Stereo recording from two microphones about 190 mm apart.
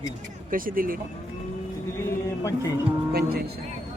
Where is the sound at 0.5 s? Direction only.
45° right (ahead or behind).